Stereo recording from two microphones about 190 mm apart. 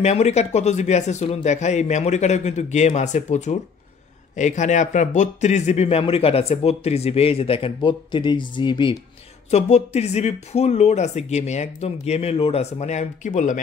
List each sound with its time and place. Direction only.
0.0 s speech: 35° left (ahead or behind)
9.5 s speech: 35° left (ahead or behind)